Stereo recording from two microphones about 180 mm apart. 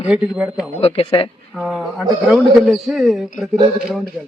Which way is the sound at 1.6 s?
5° right (ahead or behind).